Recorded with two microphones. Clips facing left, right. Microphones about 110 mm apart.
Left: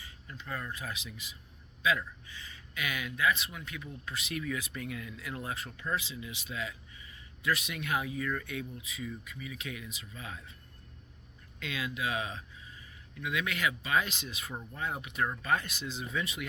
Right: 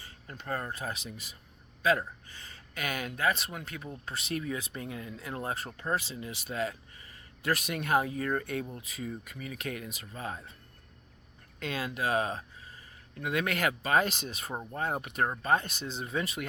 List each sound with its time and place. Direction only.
0.0 s speech: 45° right (ahead or behind)
11.6 s speech: 45° right (ahead or behind)